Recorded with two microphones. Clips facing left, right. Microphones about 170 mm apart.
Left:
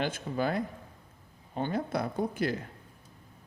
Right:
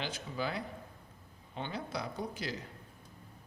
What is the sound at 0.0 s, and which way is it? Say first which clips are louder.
Speech: left 7 dB; 50° left (ahead or behind).